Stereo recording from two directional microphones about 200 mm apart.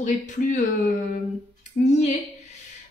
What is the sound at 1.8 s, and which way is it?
Speech, 35° left (ahead or behind).